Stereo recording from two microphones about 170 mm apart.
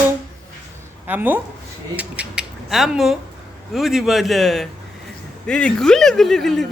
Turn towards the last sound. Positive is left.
turn(degrees=0)  # may be behind; listen again after turning